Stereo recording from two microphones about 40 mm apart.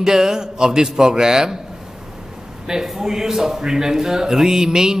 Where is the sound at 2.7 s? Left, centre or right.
Centre.